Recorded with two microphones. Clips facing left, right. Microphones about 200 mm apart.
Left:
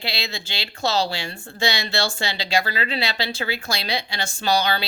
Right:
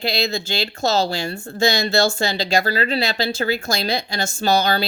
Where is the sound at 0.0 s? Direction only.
45° right (ahead or behind).